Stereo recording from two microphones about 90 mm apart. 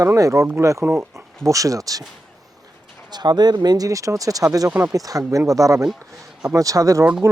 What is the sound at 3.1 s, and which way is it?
Speech, 50° right (ahead or behind).